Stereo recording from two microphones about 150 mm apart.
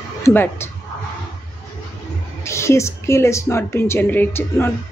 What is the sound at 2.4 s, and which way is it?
A woman's voice, 20° left (ahead or behind).